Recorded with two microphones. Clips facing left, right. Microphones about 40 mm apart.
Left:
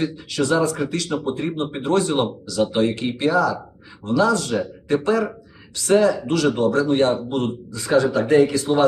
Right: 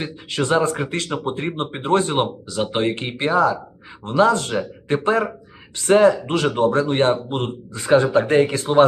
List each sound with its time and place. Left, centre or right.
0.0 s speech: right